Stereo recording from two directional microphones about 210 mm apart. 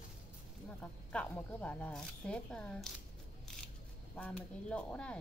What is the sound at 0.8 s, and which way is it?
Speech, 5° left (ahead or behind).